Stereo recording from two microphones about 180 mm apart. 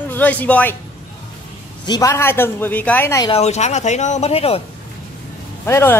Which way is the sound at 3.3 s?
40° left (ahead or behind).